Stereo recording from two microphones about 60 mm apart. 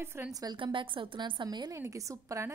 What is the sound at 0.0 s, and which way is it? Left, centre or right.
Speech, right.